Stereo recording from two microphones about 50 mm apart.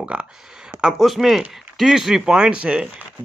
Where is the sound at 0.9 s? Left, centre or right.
Centre.